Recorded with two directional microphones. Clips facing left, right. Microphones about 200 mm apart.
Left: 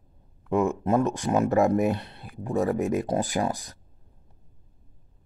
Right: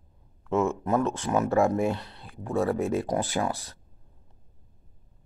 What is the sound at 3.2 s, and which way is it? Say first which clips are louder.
Speech: left 2 dB; 35° left (ahead or behind).